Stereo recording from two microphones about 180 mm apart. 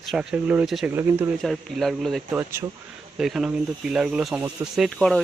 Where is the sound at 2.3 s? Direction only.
15° right (ahead or behind).